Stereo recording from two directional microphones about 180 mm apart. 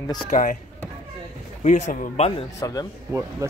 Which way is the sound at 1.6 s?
40° left (ahead or behind).